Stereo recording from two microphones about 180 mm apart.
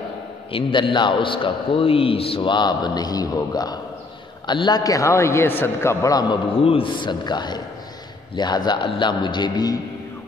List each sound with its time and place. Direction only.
0.5 s a man's voice: 30° left (ahead or behind)